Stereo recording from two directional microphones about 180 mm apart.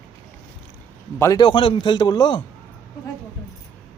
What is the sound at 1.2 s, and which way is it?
A man's voice, 20° left (ahead or behind).